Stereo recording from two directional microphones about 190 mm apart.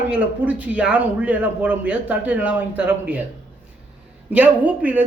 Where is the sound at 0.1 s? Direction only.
10° right (ahead or behind).